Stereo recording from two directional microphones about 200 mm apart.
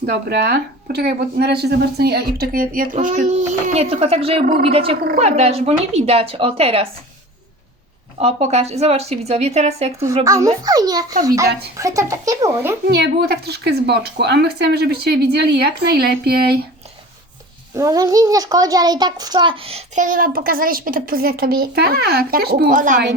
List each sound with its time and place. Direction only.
0.0 s a woman's voice: 55° right (ahead or behind); by 6.8 s 30° right (ahead or behind)
8.2 s a woman's voice: 35° right (ahead or behind)
10.2 s speech: 15° right (ahead or behind)
12.9 s a woman's voice: 55° right (ahead or behind)
17.7 s a child's voice: 15° right (ahead or behind)
20.1 s a woman's voice: 45° right (ahead or behind)